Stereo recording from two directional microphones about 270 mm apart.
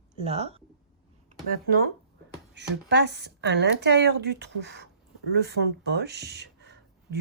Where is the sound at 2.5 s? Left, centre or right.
Right.